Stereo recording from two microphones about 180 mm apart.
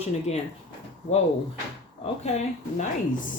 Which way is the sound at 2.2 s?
40° left (ahead or behind).